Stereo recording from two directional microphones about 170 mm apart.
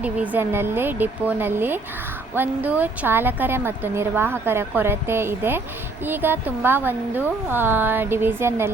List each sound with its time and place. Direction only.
0.0 s a woman's voice: 10° right (ahead or behind)